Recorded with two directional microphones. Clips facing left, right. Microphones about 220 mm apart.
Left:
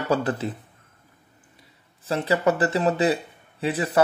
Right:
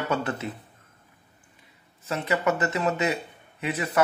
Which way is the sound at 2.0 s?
35° left (ahead or behind).